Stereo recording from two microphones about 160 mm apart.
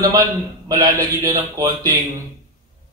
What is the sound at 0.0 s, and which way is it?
Speech, 25° right (ahead or behind).